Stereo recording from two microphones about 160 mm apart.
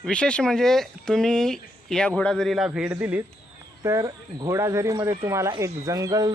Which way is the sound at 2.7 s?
10° right (ahead or behind).